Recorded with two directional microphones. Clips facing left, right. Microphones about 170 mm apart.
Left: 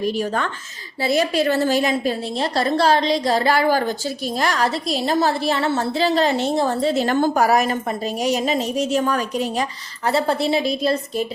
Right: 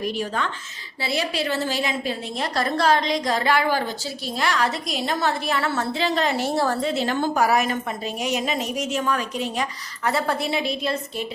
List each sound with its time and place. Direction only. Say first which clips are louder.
0.0 s a woman's voice: left 4 dB; 45° left (ahead or behind)
2.4 s a woman's voice: left 4 dB; 30° left (ahead or behind)
6.8 s a woman's voice: left 5 dB; 45° left (ahead or behind)
10.1 s a woman's voice: left 5 dB; 30° left (ahead or behind)